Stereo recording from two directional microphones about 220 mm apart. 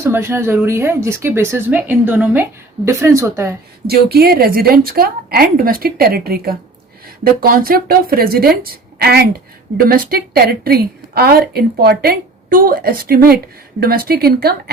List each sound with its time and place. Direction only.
0.0 s speech: 10° right (ahead or behind)
3.8 s a woman's voice: 45° right (ahead or behind)